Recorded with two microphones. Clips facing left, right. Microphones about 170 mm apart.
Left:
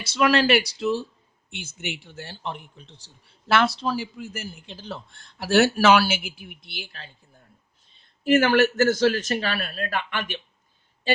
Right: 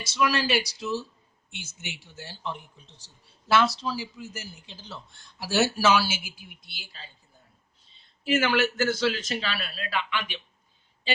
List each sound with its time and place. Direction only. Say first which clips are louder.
0.0 s a man's voice: left 5 dB; 60° left (ahead or behind)
7.9 s a man's voice: left 6 dB; 50° left (ahead or behind)